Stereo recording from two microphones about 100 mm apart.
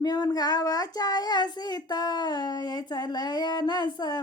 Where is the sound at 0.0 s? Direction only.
40° left (ahead or behind).